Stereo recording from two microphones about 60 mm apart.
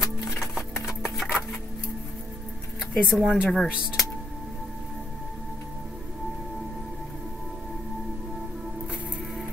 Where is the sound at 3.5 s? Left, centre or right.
Centre.